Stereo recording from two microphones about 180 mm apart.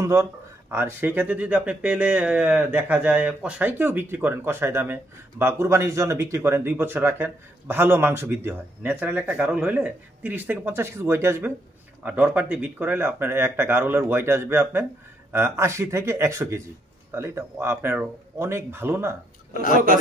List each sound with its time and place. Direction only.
0.0 s speech: 15° right (ahead or behind)